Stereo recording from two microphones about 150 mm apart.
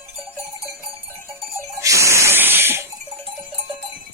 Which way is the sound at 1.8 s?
20° right (ahead or behind).